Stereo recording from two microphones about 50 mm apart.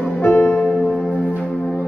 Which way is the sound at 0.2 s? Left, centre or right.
Left.